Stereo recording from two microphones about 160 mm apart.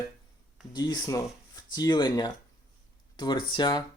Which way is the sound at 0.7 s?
25° left (ahead or behind).